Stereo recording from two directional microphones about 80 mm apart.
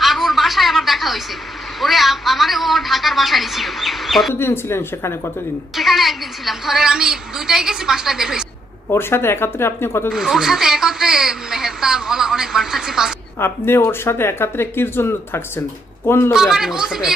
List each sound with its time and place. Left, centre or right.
0.0 s a sound: centre
1.8 s speech: centre
4.4 s speech: left
5.7 s speech: centre
8.9 s speech: left
10.1 s speech: centre
13.4 s speech: left
16.3 s speech: centre